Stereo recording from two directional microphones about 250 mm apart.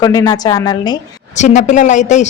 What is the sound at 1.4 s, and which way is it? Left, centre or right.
Speech, left.